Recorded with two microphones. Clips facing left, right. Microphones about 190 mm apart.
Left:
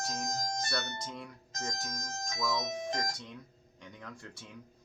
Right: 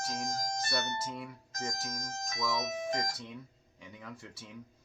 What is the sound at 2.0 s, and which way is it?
Speech, 25° right (ahead or behind).